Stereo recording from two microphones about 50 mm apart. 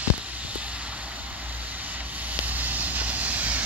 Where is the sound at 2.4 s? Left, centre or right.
Right.